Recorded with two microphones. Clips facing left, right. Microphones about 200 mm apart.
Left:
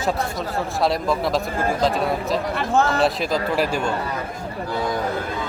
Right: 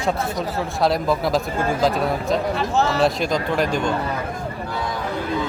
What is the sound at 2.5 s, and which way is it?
Speech, 50° left (ahead or behind).